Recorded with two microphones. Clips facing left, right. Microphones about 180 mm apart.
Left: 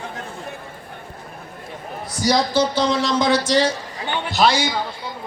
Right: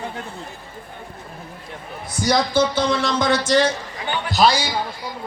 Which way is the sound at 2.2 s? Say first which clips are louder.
Even; 55° right (ahead or behind).